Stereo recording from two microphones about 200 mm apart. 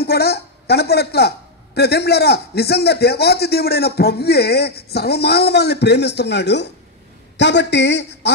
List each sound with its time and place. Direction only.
0.0 s a woman's voice: 50° left (ahead or behind)